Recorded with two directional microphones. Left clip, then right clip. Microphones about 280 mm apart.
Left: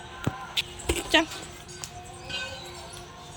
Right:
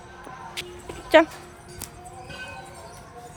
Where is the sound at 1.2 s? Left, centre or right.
Centre.